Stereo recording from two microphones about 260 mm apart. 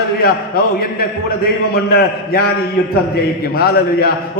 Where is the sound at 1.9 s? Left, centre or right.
Left.